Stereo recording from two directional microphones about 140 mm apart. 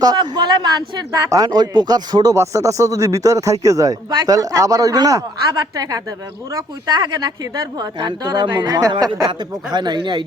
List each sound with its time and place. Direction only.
0.0 s a woman's voice: 30° right (ahead or behind)